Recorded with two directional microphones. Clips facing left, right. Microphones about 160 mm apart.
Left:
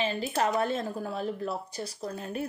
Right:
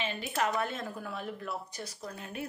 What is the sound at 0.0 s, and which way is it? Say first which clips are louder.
Speech: left 4 dB; 35° left (ahead or behind).